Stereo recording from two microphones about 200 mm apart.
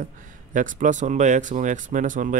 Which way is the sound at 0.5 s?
40° right (ahead or behind).